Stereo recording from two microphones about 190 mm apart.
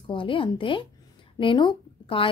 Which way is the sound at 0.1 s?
25° left (ahead or behind).